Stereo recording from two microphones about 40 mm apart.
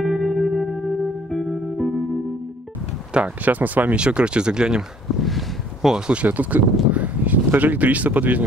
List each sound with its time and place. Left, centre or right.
0.0 s music: centre
3.1 s speech: right
3.4 s speech: right
3.9 s speech: right
5.2 s a sound: centre
6.2 s speech: right